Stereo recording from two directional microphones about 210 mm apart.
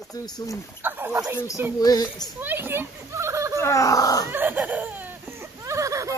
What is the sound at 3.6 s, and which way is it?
Speech, 15° left (ahead or behind).